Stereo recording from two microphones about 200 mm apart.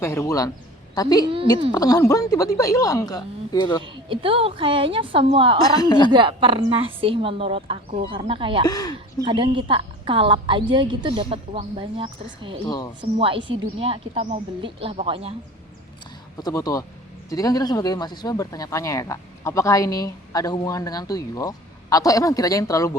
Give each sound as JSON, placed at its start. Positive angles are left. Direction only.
{"t": 0.0, "sound": "speech", "side_deg": 15}
{"t": 4.1, "sound": "a woman's voice", "side_deg": -25}
{"t": 5.6, "sound": "speech", "side_deg": 20}
{"t": 6.1, "sound": "a woman's voice", "side_deg": -25}
{"t": 8.6, "sound": "speech", "side_deg": 20}
{"t": 9.2, "sound": "a woman's voice", "side_deg": -25}
{"t": 16.4, "sound": "speech", "side_deg": 15}